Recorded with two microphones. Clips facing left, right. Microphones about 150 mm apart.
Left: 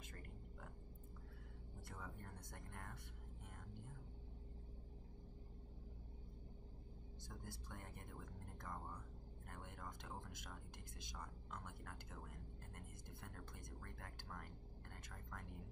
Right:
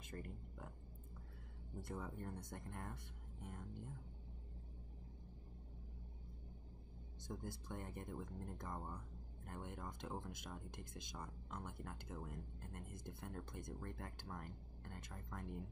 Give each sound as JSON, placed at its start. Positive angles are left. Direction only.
{"t": 1.9, "sound": "speech", "side_deg": -25}
{"t": 7.2, "sound": "speech", "side_deg": -20}